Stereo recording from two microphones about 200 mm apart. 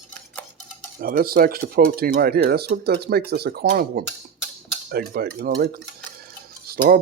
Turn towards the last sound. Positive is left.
turn(degrees=-45)  # may be behind; listen again after turning